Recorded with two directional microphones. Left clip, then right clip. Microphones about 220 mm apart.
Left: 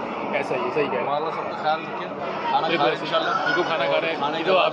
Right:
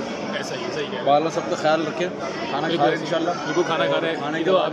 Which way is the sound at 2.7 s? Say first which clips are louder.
Right 1 dB; 30° right (ahead or behind).